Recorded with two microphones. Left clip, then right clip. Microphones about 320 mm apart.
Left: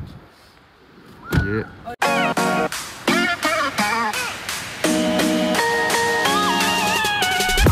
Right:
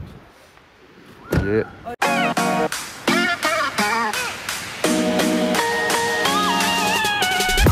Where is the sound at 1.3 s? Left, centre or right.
Centre.